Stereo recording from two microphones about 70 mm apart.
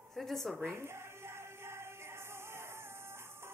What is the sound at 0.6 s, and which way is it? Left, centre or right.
Music, right.